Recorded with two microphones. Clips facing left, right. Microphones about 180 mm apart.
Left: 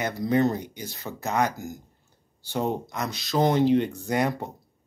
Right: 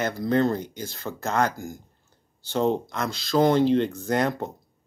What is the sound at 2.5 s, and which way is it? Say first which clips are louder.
Speech: right 4 dB; 10° left (ahead or behind).